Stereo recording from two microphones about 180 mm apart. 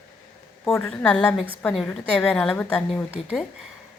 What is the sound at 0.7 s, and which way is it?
A woman's voice, 15° left (ahead or behind).